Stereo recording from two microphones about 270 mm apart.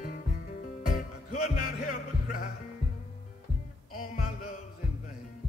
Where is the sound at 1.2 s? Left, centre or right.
Left.